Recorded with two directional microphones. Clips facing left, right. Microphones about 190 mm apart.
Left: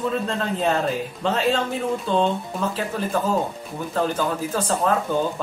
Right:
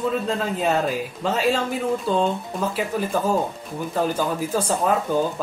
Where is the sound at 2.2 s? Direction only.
5° right (ahead or behind).